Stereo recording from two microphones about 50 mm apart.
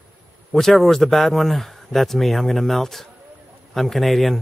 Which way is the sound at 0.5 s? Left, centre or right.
Centre.